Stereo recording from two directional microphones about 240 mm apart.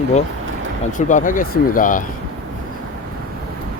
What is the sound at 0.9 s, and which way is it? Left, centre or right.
Speech, left.